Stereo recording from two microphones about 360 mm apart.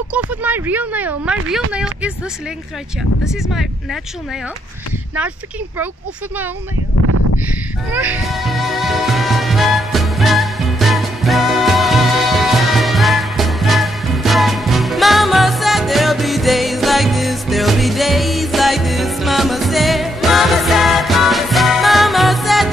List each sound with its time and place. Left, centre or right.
0.3 s speech: centre
3.3 s speech: centre
7.9 s music: centre